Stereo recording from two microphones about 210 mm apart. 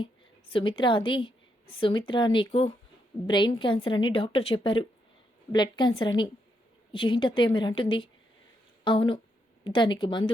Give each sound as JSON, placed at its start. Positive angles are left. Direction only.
{"t": 0.0, "sound": "a woman's voice", "side_deg": 25}